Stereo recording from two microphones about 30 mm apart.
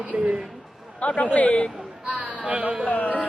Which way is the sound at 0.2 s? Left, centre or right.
Right.